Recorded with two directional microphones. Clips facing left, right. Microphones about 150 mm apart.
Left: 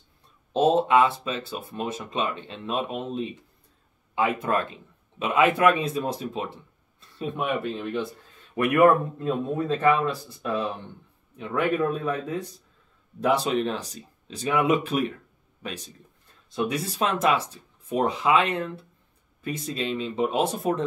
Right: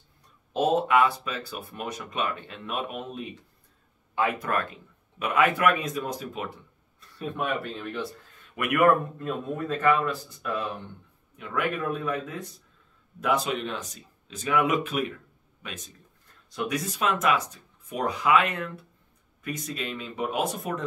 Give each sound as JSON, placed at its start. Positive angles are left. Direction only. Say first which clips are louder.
{"t": 0.5, "sound": "speech", "louder": "left 3 dB", "side_deg": 25}